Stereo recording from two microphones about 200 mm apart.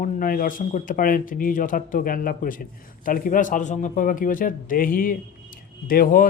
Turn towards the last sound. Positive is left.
turn(degrees=45)  # may be behind; listen again after turning